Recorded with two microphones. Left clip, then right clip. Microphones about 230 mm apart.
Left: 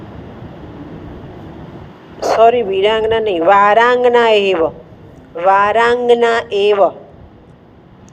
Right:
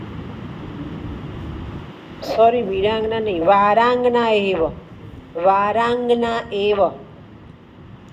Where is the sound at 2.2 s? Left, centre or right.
Left.